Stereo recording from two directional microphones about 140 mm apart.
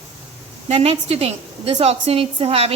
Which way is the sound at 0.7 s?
45° right (ahead or behind).